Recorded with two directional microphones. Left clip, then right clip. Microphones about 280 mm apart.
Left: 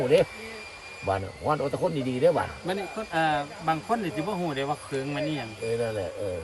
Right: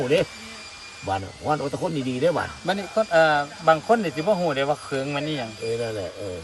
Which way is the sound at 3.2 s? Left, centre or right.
Centre.